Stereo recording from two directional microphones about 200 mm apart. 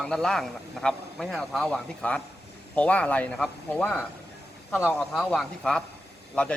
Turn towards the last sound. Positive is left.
turn(degrees=5)  # may be behind; listen again after turning